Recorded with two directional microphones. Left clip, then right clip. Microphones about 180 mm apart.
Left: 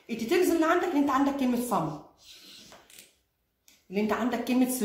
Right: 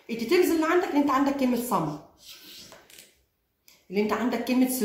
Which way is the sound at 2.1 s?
Centre (ahead or behind).